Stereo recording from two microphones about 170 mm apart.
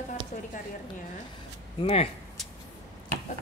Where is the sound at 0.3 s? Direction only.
50° left (ahead or behind).